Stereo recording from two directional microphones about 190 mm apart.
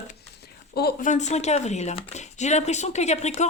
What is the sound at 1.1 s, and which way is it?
Speech, 35° left (ahead or behind).